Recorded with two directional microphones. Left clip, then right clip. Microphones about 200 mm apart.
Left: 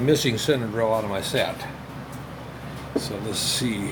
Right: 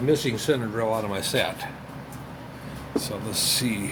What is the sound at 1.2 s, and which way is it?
Speech, 30° right (ahead or behind).